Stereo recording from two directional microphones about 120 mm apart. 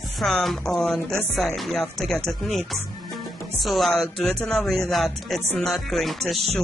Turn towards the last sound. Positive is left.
turn(degrees=0)  # may be behind; listen again after turning